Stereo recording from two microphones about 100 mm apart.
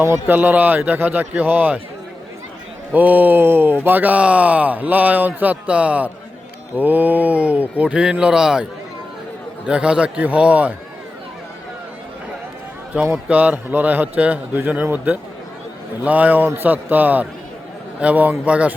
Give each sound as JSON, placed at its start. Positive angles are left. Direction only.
{"t": 0.0, "sound": "a man's voice", "side_deg": -25}
{"t": 2.9, "sound": "speech", "side_deg": -15}
{"t": 9.6, "sound": "speech", "side_deg": -10}
{"t": 12.9, "sound": "a man's voice", "side_deg": -15}